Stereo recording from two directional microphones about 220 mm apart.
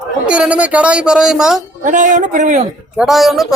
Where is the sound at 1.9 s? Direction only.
35° right (ahead or behind).